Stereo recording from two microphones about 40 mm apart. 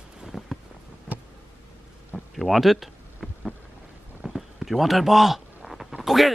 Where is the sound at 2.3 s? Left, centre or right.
Centre.